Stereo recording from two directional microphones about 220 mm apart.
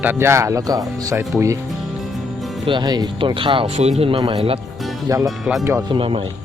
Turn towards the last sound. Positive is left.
turn(degrees=-25)  # may be behind; listen again after turning